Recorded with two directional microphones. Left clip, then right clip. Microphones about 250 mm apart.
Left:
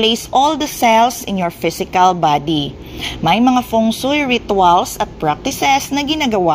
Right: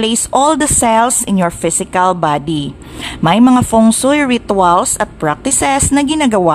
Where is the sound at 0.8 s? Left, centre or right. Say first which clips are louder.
Left 3 dB; centre.